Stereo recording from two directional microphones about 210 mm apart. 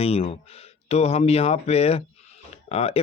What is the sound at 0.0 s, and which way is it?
Speech, 30° left (ahead or behind).